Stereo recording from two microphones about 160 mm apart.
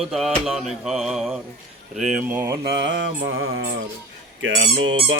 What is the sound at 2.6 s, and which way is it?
Mantra, 90° right.